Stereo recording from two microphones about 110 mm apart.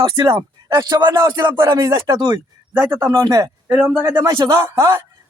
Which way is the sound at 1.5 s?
25° right (ahead or behind).